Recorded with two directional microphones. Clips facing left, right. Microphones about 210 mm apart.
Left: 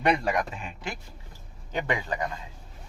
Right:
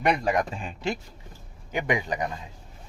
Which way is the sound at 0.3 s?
30° right (ahead or behind).